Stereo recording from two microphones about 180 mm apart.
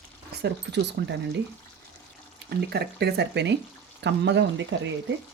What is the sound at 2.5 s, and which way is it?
Speech, 65° right (ahead or behind).